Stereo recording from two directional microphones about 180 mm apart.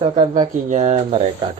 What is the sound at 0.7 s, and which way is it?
Speech, 40° right (ahead or behind).